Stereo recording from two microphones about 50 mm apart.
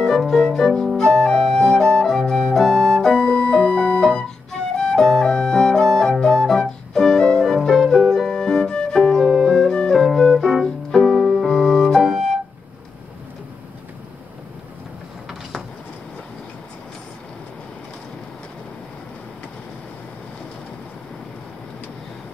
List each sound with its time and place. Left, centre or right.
0.2 s flute: centre
2.6 s music: centre
3.1 s music: left
4.0 s flute: centre
10.6 s keyboard: centre
11.4 s flute: centre